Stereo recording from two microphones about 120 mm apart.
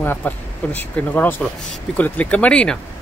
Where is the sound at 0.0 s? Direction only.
15° left (ahead or behind).